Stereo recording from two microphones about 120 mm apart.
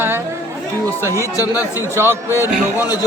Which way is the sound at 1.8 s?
20° right (ahead or behind).